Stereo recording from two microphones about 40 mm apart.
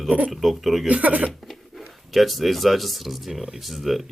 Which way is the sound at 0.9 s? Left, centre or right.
Right.